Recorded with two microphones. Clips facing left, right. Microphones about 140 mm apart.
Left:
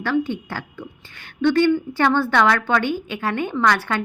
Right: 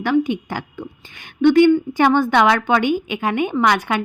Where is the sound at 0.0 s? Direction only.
15° right (ahead or behind).